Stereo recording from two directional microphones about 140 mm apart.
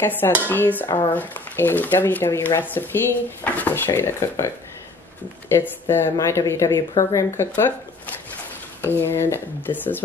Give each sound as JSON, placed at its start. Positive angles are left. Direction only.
{"t": 0.0, "sound": "speech", "side_deg": 15}
{"t": 0.8, "sound": "speech", "side_deg": 35}
{"t": 1.1, "sound": "speech", "side_deg": 15}
{"t": 5.5, "sound": "speech", "side_deg": 15}
{"t": 8.8, "sound": "speech", "side_deg": 15}